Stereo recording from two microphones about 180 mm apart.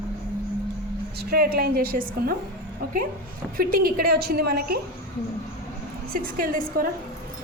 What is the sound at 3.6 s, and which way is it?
A woman's voice, 55° right (ahead or behind).